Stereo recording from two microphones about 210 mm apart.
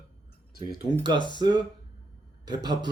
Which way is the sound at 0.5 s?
50° left (ahead or behind).